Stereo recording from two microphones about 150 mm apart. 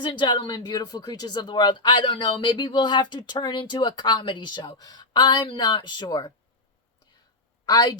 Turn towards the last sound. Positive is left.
turn(degrees=25)  # may be behind; listen again after turning